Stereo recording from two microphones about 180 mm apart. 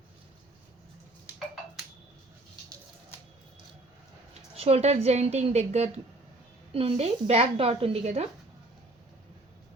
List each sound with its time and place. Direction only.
4.5 s a woman's voice: 35° right (ahead or behind)